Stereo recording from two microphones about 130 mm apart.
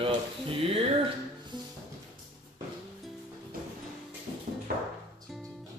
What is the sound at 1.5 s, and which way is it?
Music, 35° right (ahead or behind).